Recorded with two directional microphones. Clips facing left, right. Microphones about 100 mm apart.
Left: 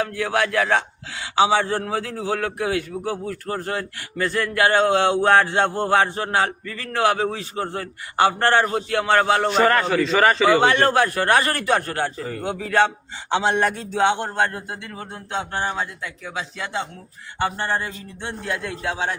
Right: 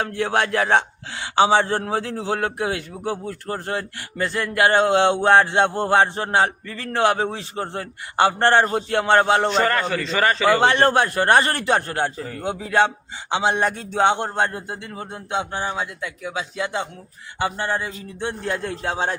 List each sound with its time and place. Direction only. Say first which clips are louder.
0.1 s a man's voice: right 1 dB; 30° right (ahead or behind)
9.5 s a man's voice: left 2 dB; 5° left (ahead or behind)
10.6 s a man's voice: even; 30° right (ahead or behind)
16.2 s a man's voice: right 4 dB; 20° right (ahead or behind)
18.4 s a man's voice: left 1 dB; 35° right (ahead or behind)